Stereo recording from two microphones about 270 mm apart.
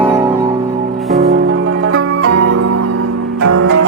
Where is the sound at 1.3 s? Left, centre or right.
Right.